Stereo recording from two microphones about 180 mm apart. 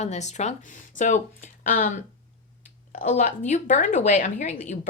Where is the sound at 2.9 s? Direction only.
45° left (ahead or behind).